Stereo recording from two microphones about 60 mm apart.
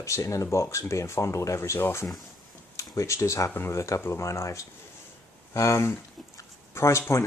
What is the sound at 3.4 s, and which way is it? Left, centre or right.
Speech, left.